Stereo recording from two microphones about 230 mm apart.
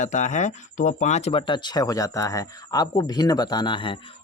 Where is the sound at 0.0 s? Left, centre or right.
Left.